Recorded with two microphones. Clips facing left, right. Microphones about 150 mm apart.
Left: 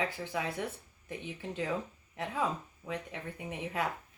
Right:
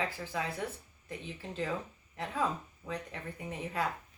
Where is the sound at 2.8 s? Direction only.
10° left (ahead or behind).